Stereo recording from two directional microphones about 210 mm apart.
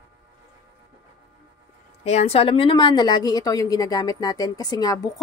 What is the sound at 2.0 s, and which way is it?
A woman's voice, 30° left (ahead or behind).